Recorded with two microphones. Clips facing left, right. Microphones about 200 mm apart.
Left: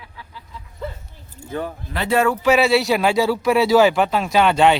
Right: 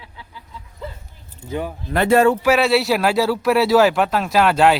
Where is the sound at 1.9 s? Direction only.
50° right (ahead or behind).